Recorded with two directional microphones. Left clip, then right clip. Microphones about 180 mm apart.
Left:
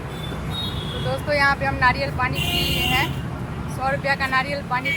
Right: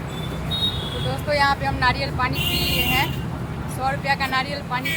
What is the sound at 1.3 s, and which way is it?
Speech, 15° left (ahead or behind).